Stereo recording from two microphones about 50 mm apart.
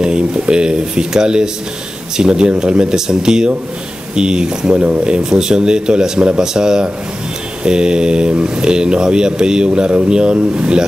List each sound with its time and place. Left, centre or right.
0.0 s speech: centre